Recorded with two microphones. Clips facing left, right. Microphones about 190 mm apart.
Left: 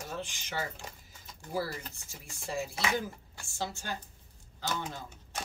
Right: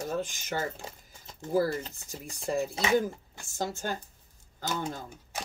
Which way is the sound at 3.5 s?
45° right (ahead or behind).